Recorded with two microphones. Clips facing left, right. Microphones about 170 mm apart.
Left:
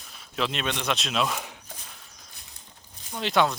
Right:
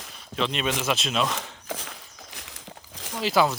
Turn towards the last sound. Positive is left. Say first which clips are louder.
# right 1 dB
turn(degrees=-5)  # may be behind; listen again after turning